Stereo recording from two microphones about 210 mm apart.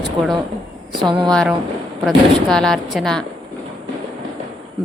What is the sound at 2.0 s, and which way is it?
Music, 5° left (ahead or behind).